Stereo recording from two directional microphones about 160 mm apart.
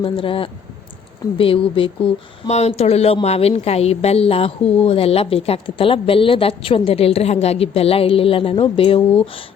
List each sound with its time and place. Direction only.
0.0 s a woman's voice: 35° left (ahead or behind)